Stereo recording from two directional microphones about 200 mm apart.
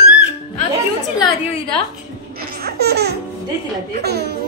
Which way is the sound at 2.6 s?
55° right (ahead or behind).